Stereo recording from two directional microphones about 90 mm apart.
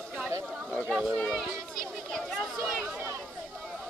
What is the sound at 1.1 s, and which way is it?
Speech, 10° left (ahead or behind).